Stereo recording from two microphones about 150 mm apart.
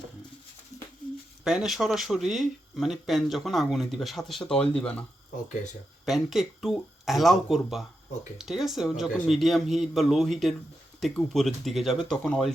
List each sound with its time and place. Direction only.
1.5 s speech: 5° right (ahead or behind)
6.1 s speech: centre (ahead or behind)